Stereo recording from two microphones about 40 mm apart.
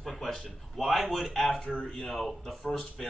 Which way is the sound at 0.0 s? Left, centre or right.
Centre.